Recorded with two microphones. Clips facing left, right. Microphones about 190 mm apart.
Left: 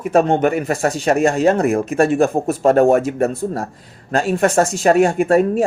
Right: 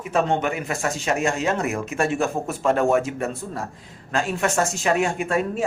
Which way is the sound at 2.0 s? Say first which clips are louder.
Left 7 dB; 50° left (ahead or behind).